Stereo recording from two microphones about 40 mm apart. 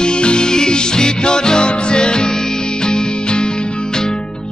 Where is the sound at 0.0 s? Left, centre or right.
Left.